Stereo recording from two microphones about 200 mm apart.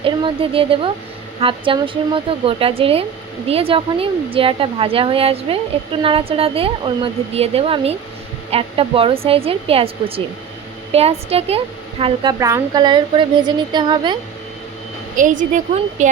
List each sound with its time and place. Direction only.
0.0 s speech: 25° right (ahead or behind)
15.1 s a woman's voice: 40° right (ahead or behind)